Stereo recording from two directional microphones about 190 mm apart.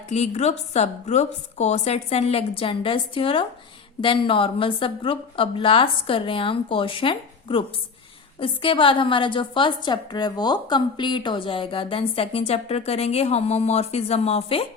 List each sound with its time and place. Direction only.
0.1 s a woman's voice: 35° left (ahead or behind)